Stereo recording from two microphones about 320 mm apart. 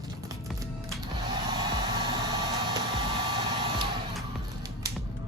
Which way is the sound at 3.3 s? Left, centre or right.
Centre.